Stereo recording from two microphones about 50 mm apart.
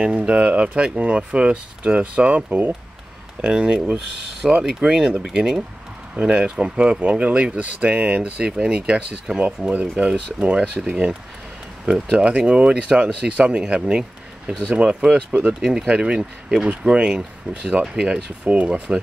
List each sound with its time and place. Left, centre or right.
0.3 s speech: right
6.1 s speech: right